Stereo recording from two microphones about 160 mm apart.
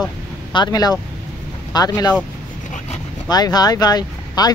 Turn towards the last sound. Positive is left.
turn(degrees=25)  # may be behind; listen again after turning